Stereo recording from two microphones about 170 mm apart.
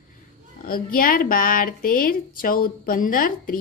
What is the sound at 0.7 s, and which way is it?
A woman's voice, 60° left (ahead or behind).